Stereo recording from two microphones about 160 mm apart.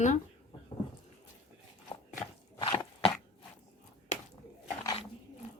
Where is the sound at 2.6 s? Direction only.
35° left (ahead or behind).